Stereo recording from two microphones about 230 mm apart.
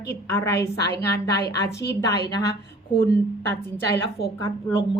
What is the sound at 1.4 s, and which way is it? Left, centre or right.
Speech, left.